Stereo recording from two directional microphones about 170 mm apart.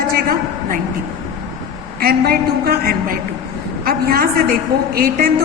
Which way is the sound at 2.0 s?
65° right (ahead or behind).